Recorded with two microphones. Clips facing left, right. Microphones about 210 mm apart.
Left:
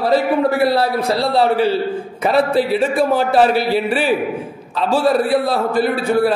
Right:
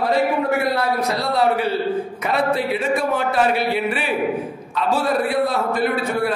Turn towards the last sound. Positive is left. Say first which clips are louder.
# left 4 dB
turn(degrees=35)  # may be behind; listen again after turning